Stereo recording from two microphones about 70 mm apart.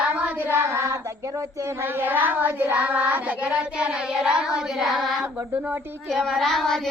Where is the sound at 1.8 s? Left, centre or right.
Right.